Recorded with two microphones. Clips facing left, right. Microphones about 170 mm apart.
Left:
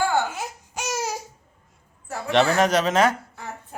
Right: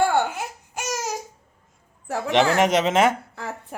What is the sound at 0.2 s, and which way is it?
Baby cry, 60° right (ahead or behind).